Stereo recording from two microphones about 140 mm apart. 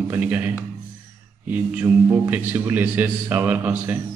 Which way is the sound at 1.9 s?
20° right (ahead or behind).